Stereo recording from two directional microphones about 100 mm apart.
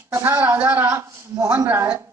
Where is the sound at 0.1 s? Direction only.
25° right (ahead or behind).